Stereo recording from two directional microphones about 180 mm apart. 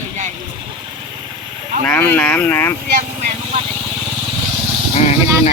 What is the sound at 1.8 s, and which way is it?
Speech, 10° left (ahead or behind).